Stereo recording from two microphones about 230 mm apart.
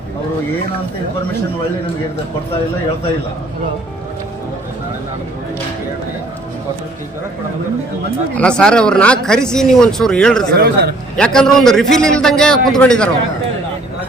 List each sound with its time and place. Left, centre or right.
8.4 s speech: centre
10.5 s a man's voice: right
11.2 s speech: centre